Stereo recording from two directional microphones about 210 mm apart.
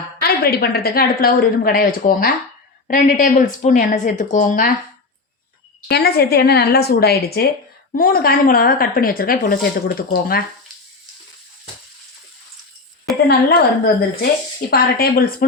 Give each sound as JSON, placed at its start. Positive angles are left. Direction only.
{"t": 0.2, "sound": "a woman's voice", "side_deg": 45}
{"t": 5.9, "sound": "a woman's voice", "side_deg": 50}
{"t": 13.2, "sound": "a woman's voice", "side_deg": 50}